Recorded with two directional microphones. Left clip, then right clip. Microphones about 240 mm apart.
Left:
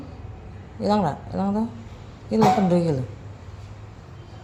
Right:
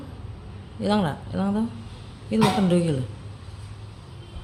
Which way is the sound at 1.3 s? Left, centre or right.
Centre.